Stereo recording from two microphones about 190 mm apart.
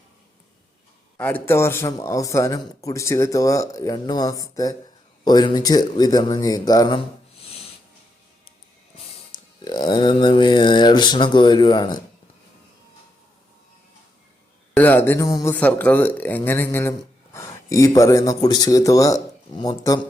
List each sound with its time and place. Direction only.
1.1 s speech: 10° left (ahead or behind)
9.3 s speech: 25° left (ahead or behind)
14.7 s speech: 10° left (ahead or behind)